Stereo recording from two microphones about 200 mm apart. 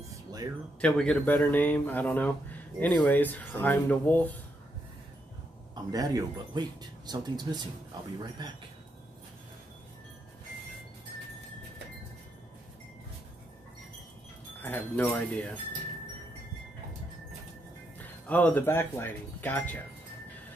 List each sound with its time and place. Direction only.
0.1 s music: 20° right (ahead or behind)
0.7 s speech: 5° left (ahead or behind)
5.9 s speech: 20° right (ahead or behind)
14.6 s speech: 10° left (ahead or behind)
17.9 s speech: 10° left (ahead or behind)